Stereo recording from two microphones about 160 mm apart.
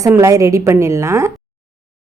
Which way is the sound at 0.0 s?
20° right (ahead or behind).